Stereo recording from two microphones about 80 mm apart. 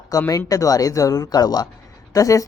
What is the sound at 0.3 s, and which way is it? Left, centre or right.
A woman's voice, left.